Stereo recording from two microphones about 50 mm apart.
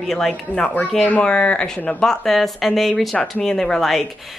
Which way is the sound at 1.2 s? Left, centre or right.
Left.